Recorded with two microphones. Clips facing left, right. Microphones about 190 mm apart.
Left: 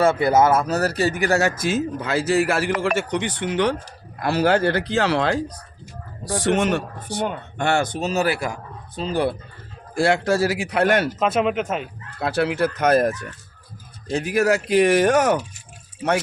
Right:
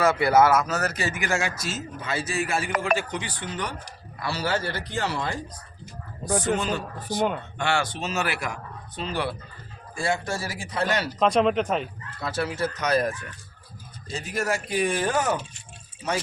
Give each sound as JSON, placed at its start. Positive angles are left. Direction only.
{"t": 0.0, "sound": "speech", "side_deg": 25}
{"t": 2.8, "sound": "a man's voice", "side_deg": 75}
{"t": 4.2, "sound": "speech", "side_deg": 55}
{"t": 6.4, "sound": "speech", "side_deg": 85}
{"t": 7.6, "sound": "speech", "side_deg": 45}
{"t": 10.0, "sound": "a man's voice", "side_deg": 80}
{"t": 11.2, "sound": "speech", "side_deg": 5}
{"t": 12.2, "sound": "speech", "side_deg": 65}
{"t": 14.1, "sound": "speech", "side_deg": 65}